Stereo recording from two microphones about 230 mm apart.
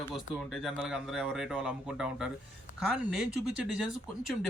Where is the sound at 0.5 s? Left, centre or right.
Centre.